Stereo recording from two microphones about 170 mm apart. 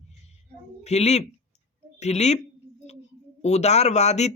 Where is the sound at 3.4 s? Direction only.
40° left (ahead or behind).